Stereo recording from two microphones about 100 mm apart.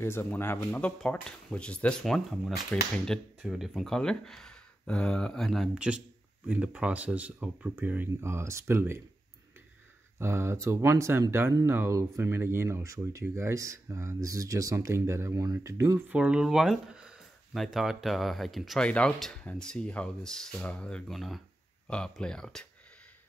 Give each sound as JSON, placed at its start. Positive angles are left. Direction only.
{"t": 0.0, "sound": "speech", "side_deg": 25}
{"t": 5.8, "sound": "speech", "side_deg": -10}
{"t": 10.1, "sound": "speech", "side_deg": -25}
{"t": 16.1, "sound": "speech", "side_deg": -10}
{"t": 18.8, "sound": "speech", "side_deg": 10}